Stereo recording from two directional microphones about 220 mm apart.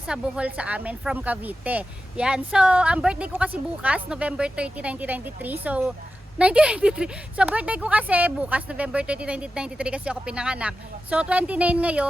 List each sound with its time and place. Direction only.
0.1 s speech: 5° right (ahead or behind)